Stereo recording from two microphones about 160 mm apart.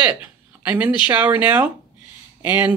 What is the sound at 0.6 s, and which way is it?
Speech, 10° right (ahead or behind).